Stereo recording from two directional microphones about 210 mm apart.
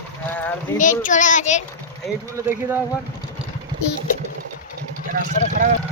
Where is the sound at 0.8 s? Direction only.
40° left (ahead or behind).